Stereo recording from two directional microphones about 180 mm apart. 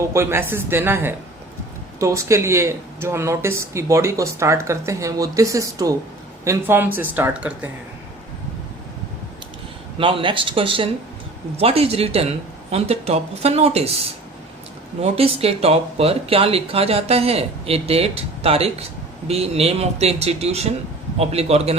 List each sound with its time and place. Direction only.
0.1 s speech: 15° right (ahead or behind)
10.0 s speech: 30° right (ahead or behind)
15.0 s speech: 35° right (ahead or behind)